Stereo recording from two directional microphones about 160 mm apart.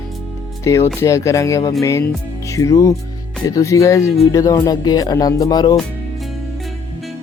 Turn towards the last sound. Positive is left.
turn(degrees=25)  # may be behind; listen again after turning